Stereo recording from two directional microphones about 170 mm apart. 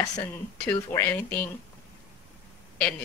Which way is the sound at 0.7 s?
15° left (ahead or behind).